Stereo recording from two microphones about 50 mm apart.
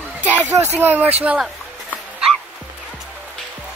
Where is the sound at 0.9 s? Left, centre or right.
Right.